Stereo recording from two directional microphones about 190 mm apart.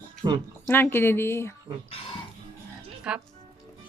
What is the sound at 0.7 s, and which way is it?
Speech, 10° left (ahead or behind).